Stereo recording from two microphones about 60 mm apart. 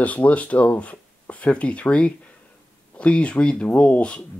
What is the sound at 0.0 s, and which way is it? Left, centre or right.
Speech, left.